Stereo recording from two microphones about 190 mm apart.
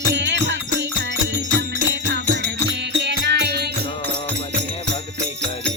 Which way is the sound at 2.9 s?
65° right (ahead or behind).